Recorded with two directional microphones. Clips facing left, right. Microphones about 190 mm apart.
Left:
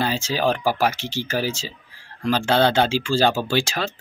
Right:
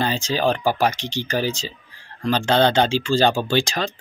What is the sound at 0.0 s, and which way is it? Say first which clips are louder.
Speech: right 1 dB; 5° left (ahead or behind).